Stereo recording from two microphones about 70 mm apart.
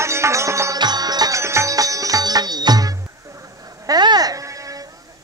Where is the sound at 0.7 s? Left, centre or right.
Right.